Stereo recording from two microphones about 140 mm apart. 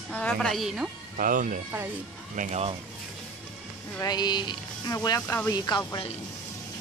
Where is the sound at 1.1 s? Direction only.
80° right.